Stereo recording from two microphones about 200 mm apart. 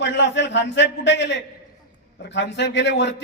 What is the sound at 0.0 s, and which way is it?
A man's voice, 60° left (ahead or behind).